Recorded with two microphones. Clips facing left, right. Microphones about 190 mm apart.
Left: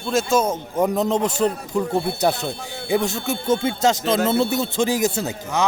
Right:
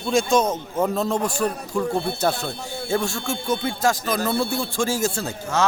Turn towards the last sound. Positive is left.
turn(degrees=15)  # may be behind; listen again after turning